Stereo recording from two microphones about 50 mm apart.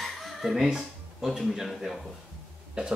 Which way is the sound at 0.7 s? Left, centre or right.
Centre.